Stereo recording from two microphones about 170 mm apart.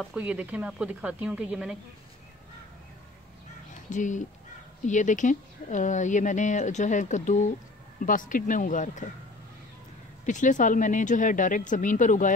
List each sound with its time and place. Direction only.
0.0 s speech: 5° right (ahead or behind)
3.9 s speech: 45° left (ahead or behind)
10.2 s speech: 50° left (ahead or behind)